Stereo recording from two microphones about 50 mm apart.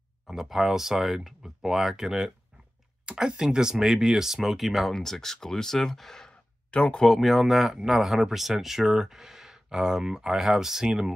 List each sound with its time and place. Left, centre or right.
0.3 s speech: centre
6.7 s speech: left
7.1 s speech: centre